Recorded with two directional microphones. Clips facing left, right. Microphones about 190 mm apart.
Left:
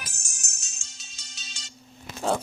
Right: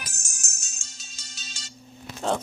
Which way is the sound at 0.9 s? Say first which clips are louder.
Right 3 dB; 40° right (ahead or behind).